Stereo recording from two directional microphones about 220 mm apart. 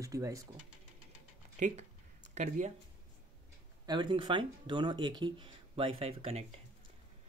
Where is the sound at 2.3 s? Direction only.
30° right (ahead or behind).